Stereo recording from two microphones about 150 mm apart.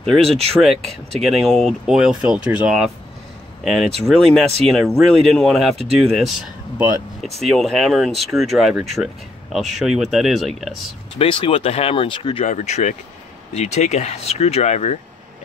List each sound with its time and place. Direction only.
0.0 s speech: 5° left (ahead or behind)
11.1 s speech: 35° left (ahead or behind)
12.4 s speech: 50° left (ahead or behind)